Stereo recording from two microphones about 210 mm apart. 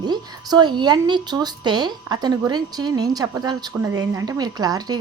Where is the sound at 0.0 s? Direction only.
20° right (ahead or behind).